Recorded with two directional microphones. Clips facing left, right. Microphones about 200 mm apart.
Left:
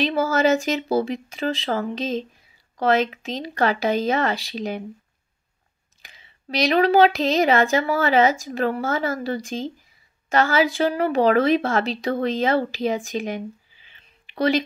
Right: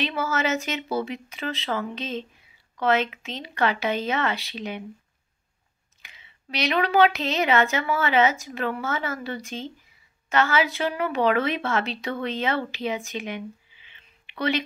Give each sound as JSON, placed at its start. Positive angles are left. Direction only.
{"t": 0.0, "sound": "speech", "side_deg": 35}
{"t": 6.0, "sound": "speech", "side_deg": 35}